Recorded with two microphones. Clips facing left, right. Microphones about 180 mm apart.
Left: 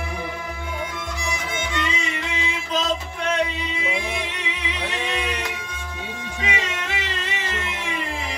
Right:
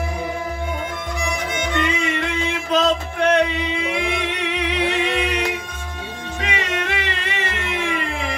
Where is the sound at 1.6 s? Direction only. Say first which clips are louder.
Right 7 dB; 55° right (ahead or behind).